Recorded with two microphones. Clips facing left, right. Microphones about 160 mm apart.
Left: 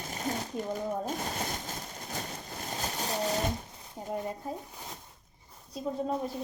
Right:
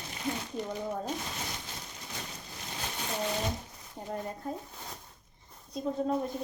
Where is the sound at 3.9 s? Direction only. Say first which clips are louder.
Left 2 dB; 10° left (ahead or behind).